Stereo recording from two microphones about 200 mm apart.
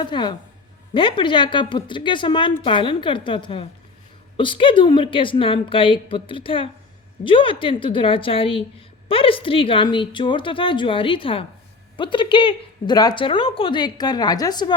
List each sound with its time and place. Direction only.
0.0 s a woman's voice: 20° left (ahead or behind)